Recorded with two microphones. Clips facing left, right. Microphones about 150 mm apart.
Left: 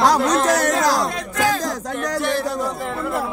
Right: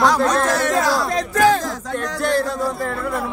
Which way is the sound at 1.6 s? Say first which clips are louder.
Left 1 dB; 40° left (ahead or behind).